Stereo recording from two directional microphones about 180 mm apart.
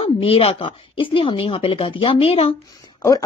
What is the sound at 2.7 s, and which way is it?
Speech, 20° left (ahead or behind).